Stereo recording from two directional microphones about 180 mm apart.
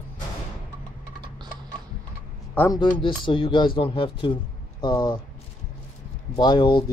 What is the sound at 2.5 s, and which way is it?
Speech, 15° left (ahead or behind).